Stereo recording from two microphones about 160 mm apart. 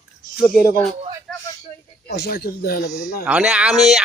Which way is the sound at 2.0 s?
90° left.